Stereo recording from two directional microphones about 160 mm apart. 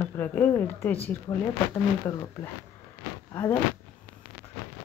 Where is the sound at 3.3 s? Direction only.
15° left (ahead or behind).